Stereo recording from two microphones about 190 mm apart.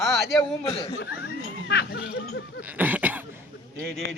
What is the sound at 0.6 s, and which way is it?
Speech, 30° left (ahead or behind).